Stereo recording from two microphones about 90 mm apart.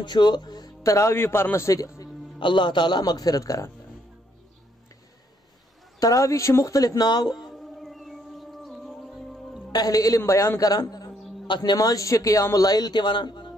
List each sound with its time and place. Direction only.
0.0 s speech: 55° left (ahead or behind)
0.8 s speech: 30° left (ahead or behind)
2.3 s a man's voice: 60° left (ahead or behind); by 3.7 s 40° left (ahead or behind)
5.9 s speech: 40° left (ahead or behind)
7.4 s music: centre (ahead or behind)
9.7 s speech: 45° left (ahead or behind)
11.4 s a man's voice: 60° left (ahead or behind)